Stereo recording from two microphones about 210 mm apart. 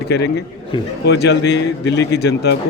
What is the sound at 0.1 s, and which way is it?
Speech, 50° left (ahead or behind).